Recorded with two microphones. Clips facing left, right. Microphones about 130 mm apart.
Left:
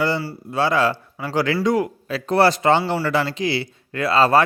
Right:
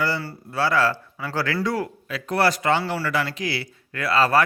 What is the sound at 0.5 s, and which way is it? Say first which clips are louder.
Speech: left 2 dB; 20° left (ahead or behind).